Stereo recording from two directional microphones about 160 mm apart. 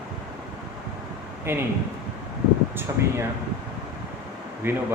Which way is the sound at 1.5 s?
15° right (ahead or behind).